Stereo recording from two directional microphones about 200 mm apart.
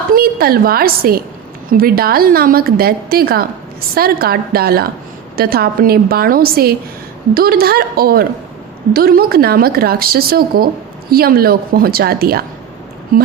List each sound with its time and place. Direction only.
0.1 s a woman's voice: 50° right (ahead or behind)